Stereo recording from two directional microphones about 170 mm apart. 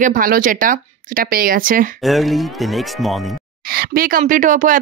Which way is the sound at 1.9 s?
Centre (ahead or behind).